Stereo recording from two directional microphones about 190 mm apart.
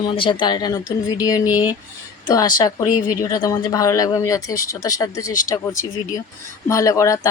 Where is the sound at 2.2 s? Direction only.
20° left (ahead or behind).